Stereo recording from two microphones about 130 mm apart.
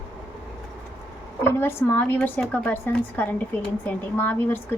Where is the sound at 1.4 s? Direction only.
15° left (ahead or behind).